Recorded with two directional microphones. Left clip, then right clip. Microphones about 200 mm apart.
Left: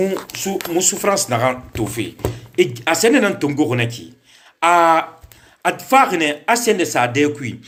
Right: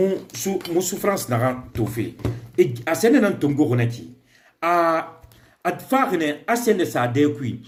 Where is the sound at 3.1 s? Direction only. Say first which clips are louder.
Left 3 dB; 10° right (ahead or behind).